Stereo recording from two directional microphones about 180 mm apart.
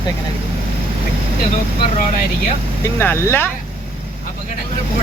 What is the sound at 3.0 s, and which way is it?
Speech, 15° left (ahead or behind).